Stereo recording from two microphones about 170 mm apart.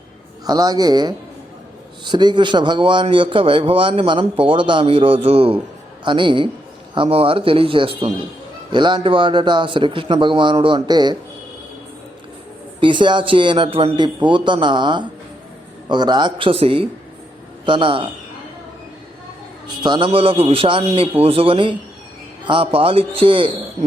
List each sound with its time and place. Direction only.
0.4 s a man's voice: 25° right (ahead or behind)
12.8 s a man's voice: 30° right (ahead or behind)
19.8 s a man's voice: 25° right (ahead or behind)